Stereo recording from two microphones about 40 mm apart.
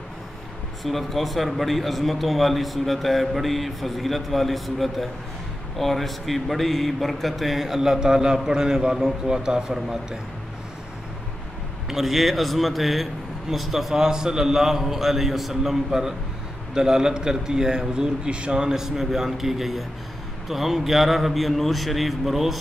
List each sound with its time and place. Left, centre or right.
0.8 s a man's voice: centre
11.9 s a man's voice: centre